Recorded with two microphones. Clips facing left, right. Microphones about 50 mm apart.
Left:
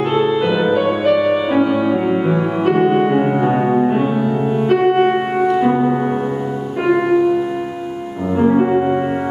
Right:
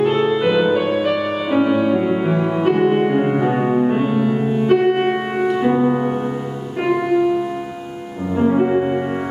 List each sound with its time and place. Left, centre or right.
0.0 s music: centre
8.4 s music: centre